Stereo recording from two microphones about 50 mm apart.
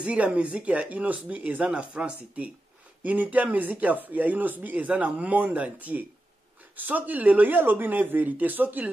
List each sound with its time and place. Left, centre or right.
0.0 s speech: right